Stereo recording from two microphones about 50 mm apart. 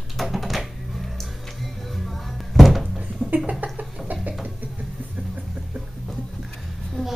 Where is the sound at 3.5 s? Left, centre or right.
Right.